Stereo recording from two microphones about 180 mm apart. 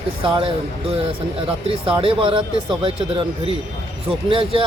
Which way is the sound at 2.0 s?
30° right (ahead or behind).